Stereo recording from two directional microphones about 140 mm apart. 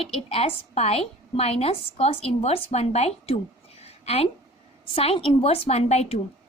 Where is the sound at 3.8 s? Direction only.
45° left (ahead or behind).